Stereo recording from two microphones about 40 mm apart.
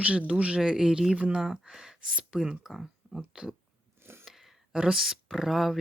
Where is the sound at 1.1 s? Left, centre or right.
Right.